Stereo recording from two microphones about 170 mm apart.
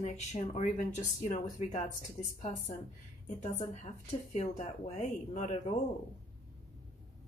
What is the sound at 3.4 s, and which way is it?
Speech, 45° left (ahead or behind).